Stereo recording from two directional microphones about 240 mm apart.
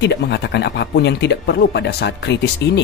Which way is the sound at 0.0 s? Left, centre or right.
Left.